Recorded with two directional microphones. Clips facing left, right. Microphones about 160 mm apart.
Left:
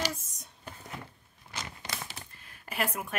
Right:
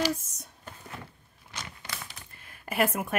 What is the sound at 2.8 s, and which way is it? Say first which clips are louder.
Speech: right 6 dB; 50° right (ahead or behind).